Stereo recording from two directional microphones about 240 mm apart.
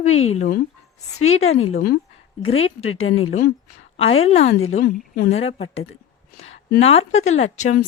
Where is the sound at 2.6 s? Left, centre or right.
Left.